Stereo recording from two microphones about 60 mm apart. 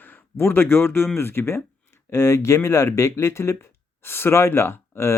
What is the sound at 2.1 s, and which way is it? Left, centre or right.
Speech, left.